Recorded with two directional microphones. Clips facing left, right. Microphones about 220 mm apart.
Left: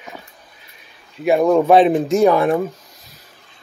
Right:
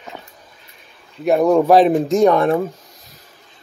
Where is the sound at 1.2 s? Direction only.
Centre (ahead or behind).